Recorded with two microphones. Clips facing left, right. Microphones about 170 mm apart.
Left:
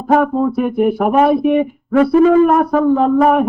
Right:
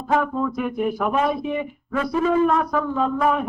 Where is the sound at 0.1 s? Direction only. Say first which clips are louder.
Left 8 dB; 55° left (ahead or behind).